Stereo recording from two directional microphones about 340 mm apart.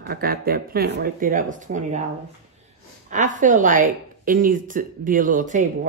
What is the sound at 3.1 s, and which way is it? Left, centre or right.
Speech, right.